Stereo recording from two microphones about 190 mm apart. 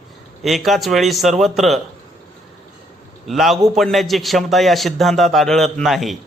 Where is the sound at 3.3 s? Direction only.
Centre (ahead or behind).